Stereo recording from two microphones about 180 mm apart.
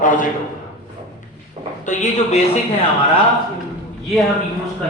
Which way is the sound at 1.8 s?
45° left (ahead or behind).